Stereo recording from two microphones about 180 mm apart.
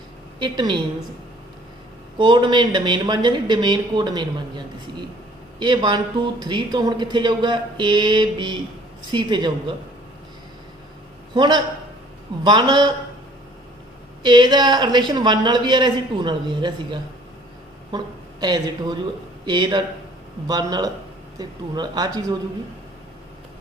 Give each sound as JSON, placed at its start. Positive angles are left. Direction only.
{"t": 0.3, "sound": "a woman's voice", "side_deg": -25}
{"t": 2.1, "sound": "speech", "side_deg": -25}
{"t": 11.3, "sound": "speech", "side_deg": -25}
{"t": 14.2, "sound": "a woman's voice", "side_deg": -25}